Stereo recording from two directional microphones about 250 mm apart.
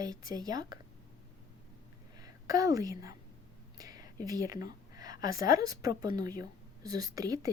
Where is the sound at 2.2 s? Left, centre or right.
Centre.